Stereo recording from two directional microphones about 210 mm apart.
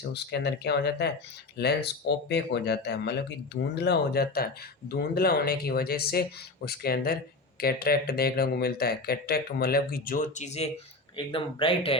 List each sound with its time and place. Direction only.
0.1 s speech: 50° left (ahead or behind); by 11.9 s 25° left (ahead or behind)